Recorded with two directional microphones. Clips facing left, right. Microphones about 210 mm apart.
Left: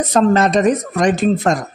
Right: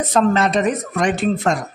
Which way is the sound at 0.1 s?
40° left (ahead or behind).